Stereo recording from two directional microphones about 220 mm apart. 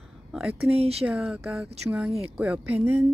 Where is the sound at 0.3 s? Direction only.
Centre (ahead or behind).